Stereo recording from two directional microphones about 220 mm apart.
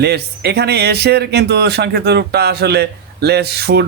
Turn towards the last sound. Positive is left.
turn(degrees=-45)  # may be behind; listen again after turning